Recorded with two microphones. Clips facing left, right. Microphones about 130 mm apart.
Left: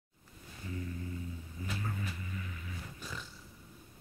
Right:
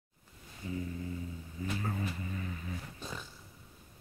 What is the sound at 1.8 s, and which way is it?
Music, 35° right (ahead or behind).